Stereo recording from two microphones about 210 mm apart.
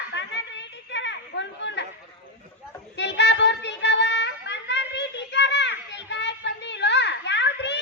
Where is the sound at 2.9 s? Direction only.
55° left (ahead or behind).